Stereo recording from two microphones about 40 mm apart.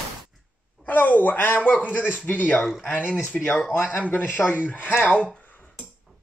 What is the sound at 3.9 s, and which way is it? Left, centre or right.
Speech, left.